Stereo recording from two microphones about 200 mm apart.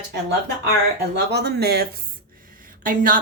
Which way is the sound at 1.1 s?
55° right (ahead or behind).